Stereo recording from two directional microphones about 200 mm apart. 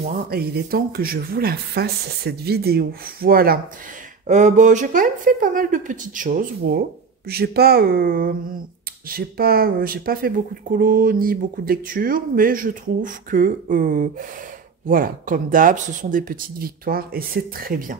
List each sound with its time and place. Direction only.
0.3 s speech: 50° right (ahead or behind)
4.3 s speech: 35° right (ahead or behind)